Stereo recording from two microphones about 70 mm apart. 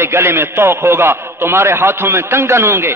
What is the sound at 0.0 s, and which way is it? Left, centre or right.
A man's voice, right.